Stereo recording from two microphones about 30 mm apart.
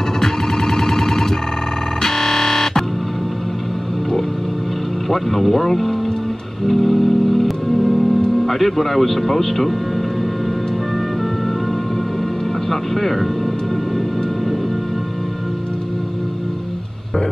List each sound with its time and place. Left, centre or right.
0.2 s car alarm: centre
2.0 s music: centre
5.1 s speech: centre
6.7 s organ: centre
7.7 s music: centre
8.4 s speech: centre
12.9 s speech: centre